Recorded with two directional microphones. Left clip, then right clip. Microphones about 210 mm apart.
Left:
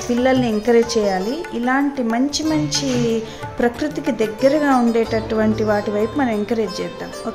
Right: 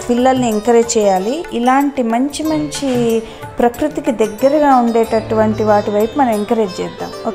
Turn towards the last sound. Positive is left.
turn(degrees=-5)  # may be behind; listen again after turning